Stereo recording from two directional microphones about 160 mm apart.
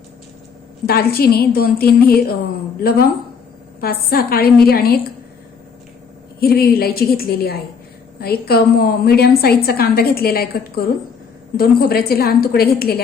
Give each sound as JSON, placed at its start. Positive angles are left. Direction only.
{"t": 0.9, "sound": "a woman's voice", "side_deg": 70}
{"t": 3.8, "sound": "a woman's voice", "side_deg": 75}
{"t": 6.4, "sound": "a woman's voice", "side_deg": 75}